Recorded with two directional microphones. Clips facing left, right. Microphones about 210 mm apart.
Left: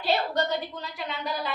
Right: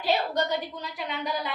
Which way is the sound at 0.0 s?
15° right (ahead or behind).